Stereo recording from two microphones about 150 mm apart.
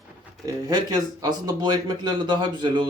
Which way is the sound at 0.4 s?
25° right (ahead or behind).